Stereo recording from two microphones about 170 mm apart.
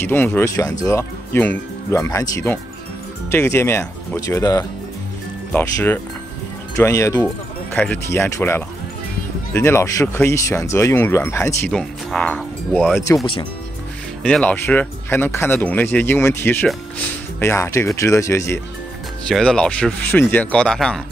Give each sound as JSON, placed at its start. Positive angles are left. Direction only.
{"t": 0.0, "sound": "speech", "side_deg": 10}
{"t": 7.7, "sound": "speech", "side_deg": 10}
{"t": 11.7, "sound": "speech", "side_deg": 5}
{"t": 14.2, "sound": "speech", "side_deg": 10}
{"t": 19.2, "sound": "speech", "side_deg": 5}